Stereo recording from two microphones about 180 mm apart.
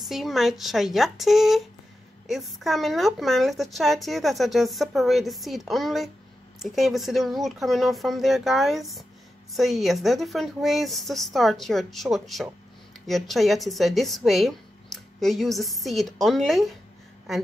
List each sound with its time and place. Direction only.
0.0 s speech: centre (ahead or behind)